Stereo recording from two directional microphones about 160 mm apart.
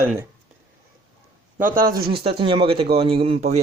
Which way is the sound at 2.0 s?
35° right (ahead or behind).